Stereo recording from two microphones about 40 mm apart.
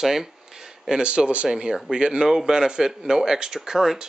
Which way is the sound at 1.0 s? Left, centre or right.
Right.